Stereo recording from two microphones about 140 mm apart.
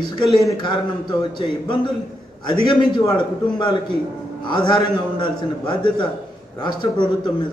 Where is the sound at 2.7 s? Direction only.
35° left (ahead or behind).